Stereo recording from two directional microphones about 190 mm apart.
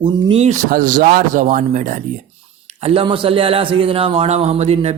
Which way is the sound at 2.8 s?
30° right (ahead or behind).